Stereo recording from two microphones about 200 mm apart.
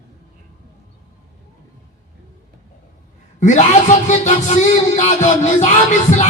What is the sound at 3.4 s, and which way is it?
A man's voice, 35° left (ahead or behind).